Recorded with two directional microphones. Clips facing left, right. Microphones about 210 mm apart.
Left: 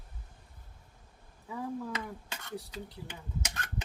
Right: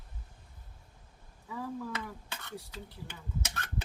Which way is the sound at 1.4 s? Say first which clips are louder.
Left 1 dB; 15° left (ahead or behind).